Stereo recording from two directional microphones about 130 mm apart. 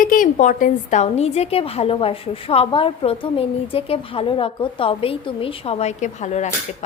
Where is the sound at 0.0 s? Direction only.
90° left.